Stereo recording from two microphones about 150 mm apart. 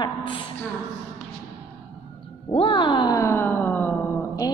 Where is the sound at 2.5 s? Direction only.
35° left (ahead or behind); by 3.9 s 15° left (ahead or behind).